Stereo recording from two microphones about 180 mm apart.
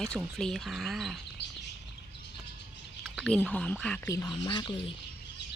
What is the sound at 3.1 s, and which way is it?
Speech, 5° left (ahead or behind).